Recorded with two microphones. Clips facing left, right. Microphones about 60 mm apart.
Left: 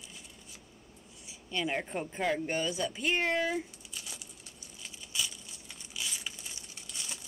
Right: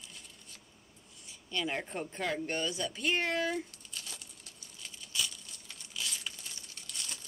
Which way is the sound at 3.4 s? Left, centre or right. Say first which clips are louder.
Left 1 dB; centre.